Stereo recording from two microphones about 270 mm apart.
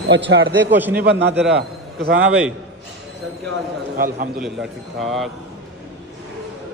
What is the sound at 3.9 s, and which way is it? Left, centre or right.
Speech, right.